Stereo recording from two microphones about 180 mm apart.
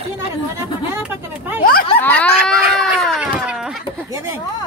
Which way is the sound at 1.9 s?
10° left (ahead or behind).